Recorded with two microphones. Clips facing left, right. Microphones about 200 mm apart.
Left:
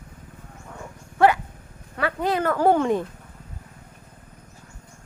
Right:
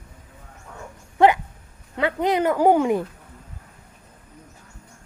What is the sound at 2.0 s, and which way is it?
Speech, 20° right (ahead or behind).